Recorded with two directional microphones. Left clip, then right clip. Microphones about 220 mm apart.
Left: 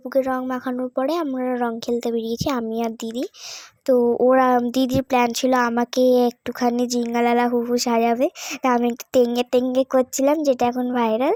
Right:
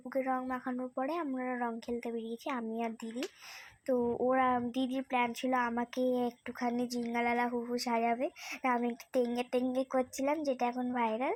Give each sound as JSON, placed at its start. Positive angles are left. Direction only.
{"t": 0.1, "sound": "speech", "side_deg": 45}
{"t": 2.2, "sound": "speech", "side_deg": 25}
{"t": 2.5, "sound": "speech", "side_deg": 50}